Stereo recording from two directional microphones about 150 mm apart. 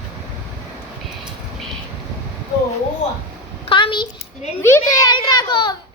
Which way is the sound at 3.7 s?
35° left (ahead or behind).